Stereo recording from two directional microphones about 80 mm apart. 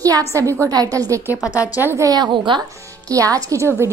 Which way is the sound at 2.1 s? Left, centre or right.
Right.